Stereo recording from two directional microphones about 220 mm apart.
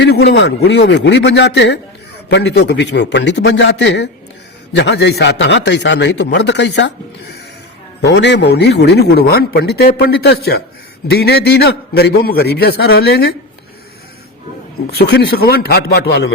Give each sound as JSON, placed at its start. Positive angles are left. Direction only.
{"t": 0.0, "sound": "a man's voice", "side_deg": 50}
{"t": 14.8, "sound": "a man's voice", "side_deg": 45}